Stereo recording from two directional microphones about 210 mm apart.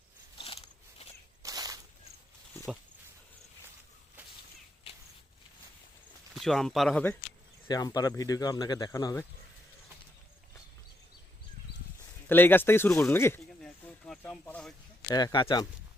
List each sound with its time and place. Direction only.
0.3 s a sound: 25° left (ahead or behind)
1.4 s a sound: 15° right (ahead or behind)
6.3 s speech: centre (ahead or behind)
7.7 s speech: 15° left (ahead or behind)
12.3 s snake: 10° left (ahead or behind)
15.1 s speech: 20° left (ahead or behind)